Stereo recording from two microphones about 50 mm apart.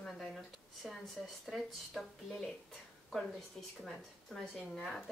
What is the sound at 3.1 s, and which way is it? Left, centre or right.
A woman's voice, centre.